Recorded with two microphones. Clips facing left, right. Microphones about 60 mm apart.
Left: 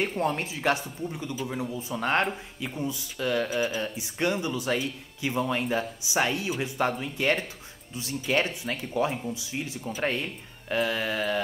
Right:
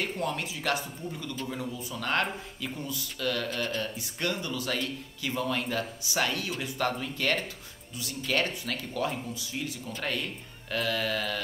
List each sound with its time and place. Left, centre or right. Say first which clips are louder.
0.0 s speech: left 4 dB; left
3.4 s speech: left 4 dB; centre
3.8 s speech: left 4 dB; centre